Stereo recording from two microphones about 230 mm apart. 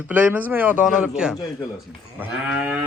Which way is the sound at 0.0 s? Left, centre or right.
Centre.